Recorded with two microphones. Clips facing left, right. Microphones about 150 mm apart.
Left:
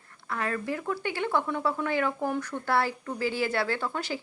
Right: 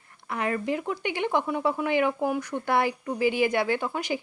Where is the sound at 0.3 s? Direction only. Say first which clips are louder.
Right 3 dB; 20° right (ahead or behind).